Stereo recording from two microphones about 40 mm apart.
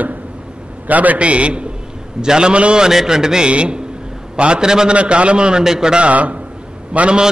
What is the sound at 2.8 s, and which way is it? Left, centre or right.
Speech, centre.